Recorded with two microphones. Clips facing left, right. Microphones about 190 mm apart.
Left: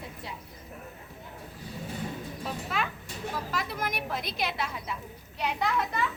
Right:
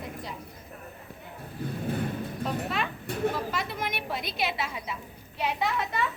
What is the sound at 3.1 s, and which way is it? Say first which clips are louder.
Speech: right 9 dB; 60° right (ahead or behind).